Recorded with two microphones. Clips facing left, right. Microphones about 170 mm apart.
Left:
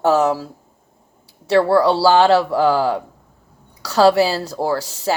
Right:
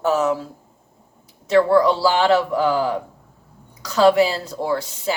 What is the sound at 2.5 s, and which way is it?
Speech, 75° left (ahead or behind).